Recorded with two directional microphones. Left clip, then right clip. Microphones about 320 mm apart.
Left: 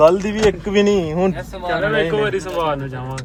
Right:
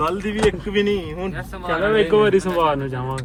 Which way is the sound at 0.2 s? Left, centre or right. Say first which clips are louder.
Left 3 dB; centre.